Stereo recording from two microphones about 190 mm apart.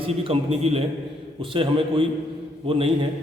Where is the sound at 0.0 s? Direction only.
30° right (ahead or behind).